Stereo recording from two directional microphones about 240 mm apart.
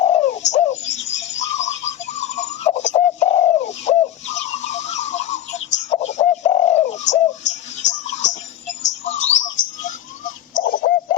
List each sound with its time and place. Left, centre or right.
0.0 s bird: left
6.9 s music: left
9.0 s bird: left
10.6 s a sound: left